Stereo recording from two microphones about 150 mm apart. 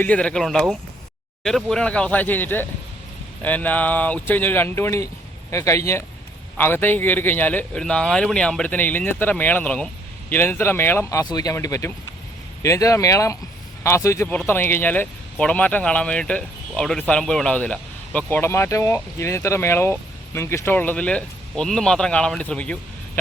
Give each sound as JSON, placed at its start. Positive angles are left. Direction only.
{"t": 0.0, "sound": "speech", "side_deg": 10}